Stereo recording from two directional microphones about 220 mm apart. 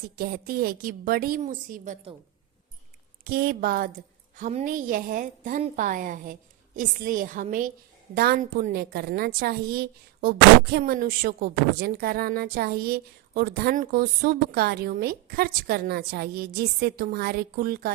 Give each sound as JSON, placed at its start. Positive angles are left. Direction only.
{"t": 0.2, "sound": "a woman's voice", "side_deg": -45}
{"t": 3.2, "sound": "a woman's voice", "side_deg": -45}